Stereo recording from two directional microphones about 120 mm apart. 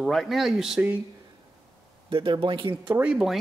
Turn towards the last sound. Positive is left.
turn(degrees=-5)  # may be behind; listen again after turning